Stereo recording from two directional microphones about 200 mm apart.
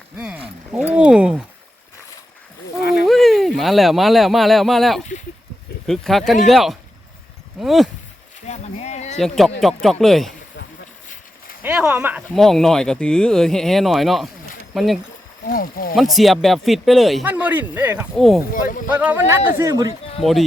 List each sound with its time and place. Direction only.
0.9 s a sound: 5° right (ahead or behind)
2.8 s a sound: 55° left (ahead or behind)
3.1 s speech: centre (ahead or behind)
8.4 s a sound: 35° left (ahead or behind)
9.1 s speech: centre (ahead or behind)
11.6 s speech: 10° right (ahead or behind)
15.4 s speech: 45° left (ahead or behind)
16.0 s a man's voice: centre (ahead or behind)
20.2 s speech: centre (ahead or behind)